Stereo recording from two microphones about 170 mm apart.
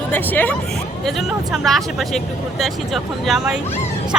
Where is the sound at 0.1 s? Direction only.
10° left (ahead or behind).